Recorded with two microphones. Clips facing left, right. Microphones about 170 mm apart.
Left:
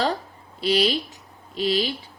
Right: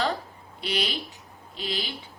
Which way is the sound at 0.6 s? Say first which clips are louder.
Left 8 dB; 35° left (ahead or behind).